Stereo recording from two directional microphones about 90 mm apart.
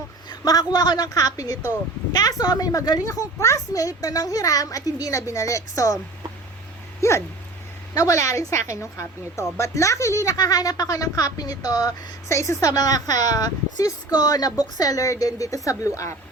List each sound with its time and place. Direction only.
0.3 s a woman's voice: 45° left (ahead or behind)
7.0 s dog: 30° left (ahead or behind)
7.9 s a woman's voice: 35° left (ahead or behind)
12.3 s a woman's voice: 35° left (ahead or behind)